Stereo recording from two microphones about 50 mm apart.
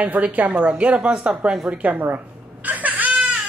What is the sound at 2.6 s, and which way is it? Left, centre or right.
Baby cry, right.